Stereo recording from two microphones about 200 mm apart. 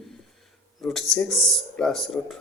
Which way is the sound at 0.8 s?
Centre (ahead or behind).